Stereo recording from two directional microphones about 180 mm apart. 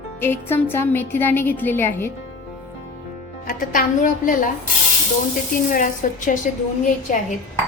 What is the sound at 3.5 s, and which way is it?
A woman's voice, 50° left (ahead or behind).